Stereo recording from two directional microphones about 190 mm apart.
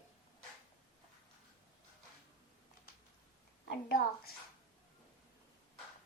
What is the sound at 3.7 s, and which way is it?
Speech, 55° left (ahead or behind).